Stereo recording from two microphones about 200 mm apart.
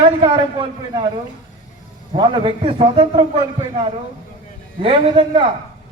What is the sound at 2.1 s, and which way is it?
A man's voice, 25° right (ahead or behind).